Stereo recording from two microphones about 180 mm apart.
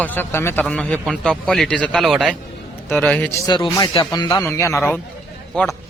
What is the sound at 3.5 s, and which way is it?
A man's voice, 20° left (ahead or behind).